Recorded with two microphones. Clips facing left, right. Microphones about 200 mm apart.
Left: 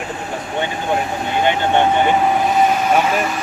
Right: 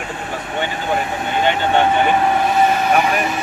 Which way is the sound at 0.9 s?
5° left (ahead or behind).